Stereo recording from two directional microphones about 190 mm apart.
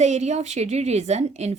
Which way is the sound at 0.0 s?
35° right (ahead or behind).